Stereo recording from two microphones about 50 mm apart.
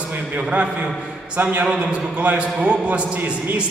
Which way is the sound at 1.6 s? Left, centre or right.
Right.